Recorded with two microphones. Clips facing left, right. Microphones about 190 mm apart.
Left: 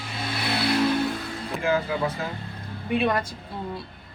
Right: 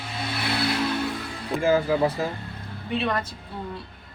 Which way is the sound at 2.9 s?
10° left (ahead or behind).